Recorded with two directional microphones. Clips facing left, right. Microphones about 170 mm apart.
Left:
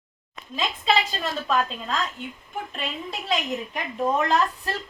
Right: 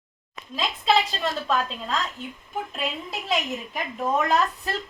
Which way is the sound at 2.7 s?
Centre (ahead or behind).